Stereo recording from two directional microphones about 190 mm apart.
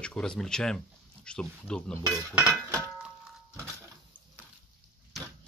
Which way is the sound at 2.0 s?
15° right (ahead or behind).